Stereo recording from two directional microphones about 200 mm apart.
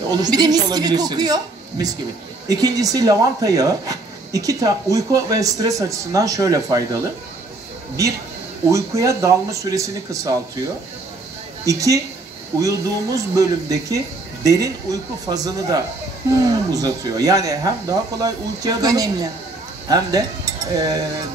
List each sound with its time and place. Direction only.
0.1 s speech: 20° right (ahead or behind)
8.6 s speech: 15° right (ahead or behind)
11.6 s speech: 15° right (ahead or behind)